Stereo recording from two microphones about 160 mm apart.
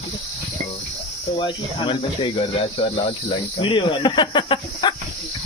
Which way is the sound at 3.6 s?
30° left (ahead or behind).